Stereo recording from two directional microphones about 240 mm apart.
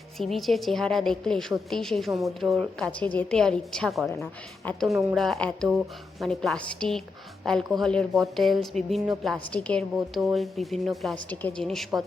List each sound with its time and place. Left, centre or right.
0.2 s speech: centre